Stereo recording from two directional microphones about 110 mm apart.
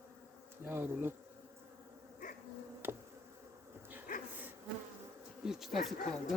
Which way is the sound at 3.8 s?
15° right (ahead or behind).